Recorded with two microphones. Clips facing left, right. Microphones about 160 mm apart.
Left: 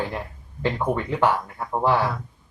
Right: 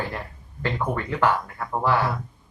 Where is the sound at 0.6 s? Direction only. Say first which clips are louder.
Left 3 dB; 20° left (ahead or behind).